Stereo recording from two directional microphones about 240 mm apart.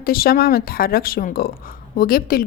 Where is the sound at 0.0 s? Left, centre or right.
Left.